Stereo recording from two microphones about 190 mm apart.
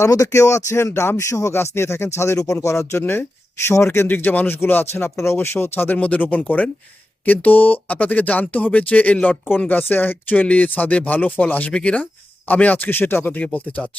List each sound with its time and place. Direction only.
0.0 s speech: 15° left (ahead or behind)